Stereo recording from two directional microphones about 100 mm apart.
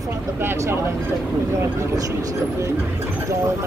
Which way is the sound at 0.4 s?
25° right (ahead or behind).